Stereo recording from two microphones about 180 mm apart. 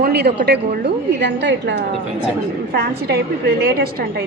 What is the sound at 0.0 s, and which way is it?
A woman's voice, 60° right (ahead or behind).